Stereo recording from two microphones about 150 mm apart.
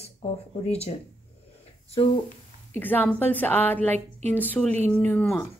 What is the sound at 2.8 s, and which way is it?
A woman's voice, 10° left (ahead or behind).